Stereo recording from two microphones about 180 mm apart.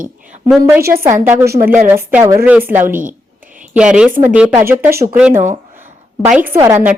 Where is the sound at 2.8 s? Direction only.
50° right (ahead or behind).